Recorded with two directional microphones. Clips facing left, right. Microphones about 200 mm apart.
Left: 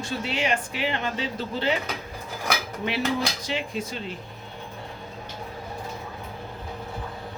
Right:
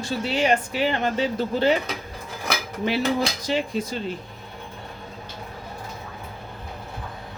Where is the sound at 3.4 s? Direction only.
40° right (ahead or behind).